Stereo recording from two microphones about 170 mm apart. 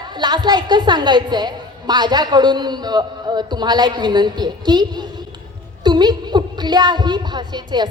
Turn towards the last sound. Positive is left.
turn(degrees=-25)  # may be behind; listen again after turning